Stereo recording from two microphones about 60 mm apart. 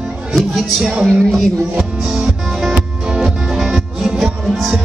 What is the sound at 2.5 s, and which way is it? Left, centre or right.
Music, centre.